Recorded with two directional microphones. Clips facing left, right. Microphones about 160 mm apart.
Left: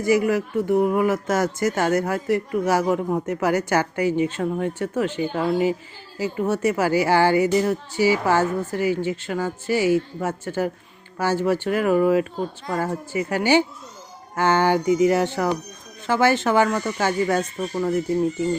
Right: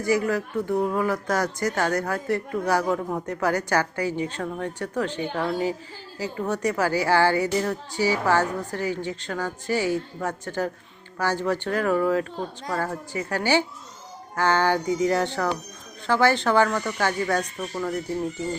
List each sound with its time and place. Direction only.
0.0 s speech: 15° left (ahead or behind)